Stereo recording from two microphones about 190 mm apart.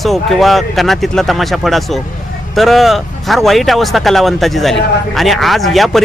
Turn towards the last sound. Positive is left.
turn(degrees=0)  # may be behind; listen again after turning